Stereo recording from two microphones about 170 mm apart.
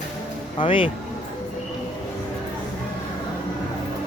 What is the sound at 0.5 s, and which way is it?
Speech, 30° left (ahead or behind).